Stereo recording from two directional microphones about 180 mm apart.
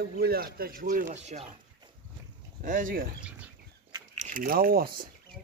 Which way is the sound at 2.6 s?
45° right (ahead or behind).